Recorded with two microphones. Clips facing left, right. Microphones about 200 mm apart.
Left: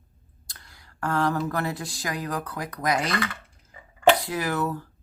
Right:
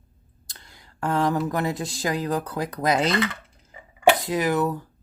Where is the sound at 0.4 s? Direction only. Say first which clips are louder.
Right 2 dB; 25° right (ahead or behind).